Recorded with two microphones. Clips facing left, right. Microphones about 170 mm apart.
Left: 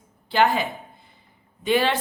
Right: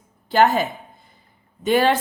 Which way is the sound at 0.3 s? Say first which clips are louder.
Right 3 dB; 45° right (ahead or behind).